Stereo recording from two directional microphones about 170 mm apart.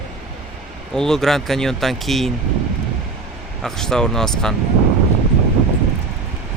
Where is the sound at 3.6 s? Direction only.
5° left (ahead or behind).